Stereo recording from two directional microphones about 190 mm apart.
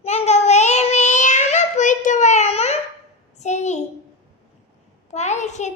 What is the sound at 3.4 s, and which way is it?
Speech, 40° left (ahead or behind).